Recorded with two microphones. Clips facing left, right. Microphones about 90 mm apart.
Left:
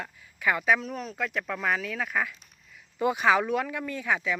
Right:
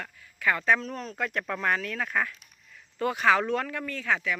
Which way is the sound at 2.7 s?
15° left (ahead or behind).